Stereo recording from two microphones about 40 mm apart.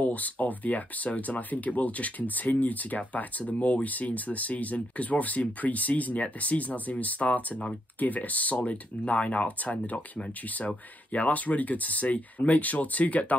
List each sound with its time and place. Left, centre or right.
0.0 s speech: left